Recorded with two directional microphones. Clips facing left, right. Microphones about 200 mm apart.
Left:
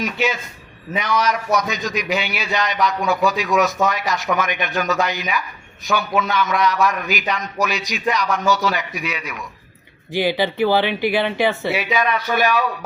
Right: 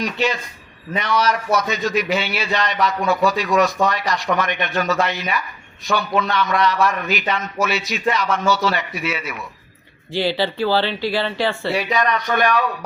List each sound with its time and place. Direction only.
0.0 s a man's voice: centre (ahead or behind)
10.1 s speech: 15° left (ahead or behind)
11.7 s a man's voice: centre (ahead or behind)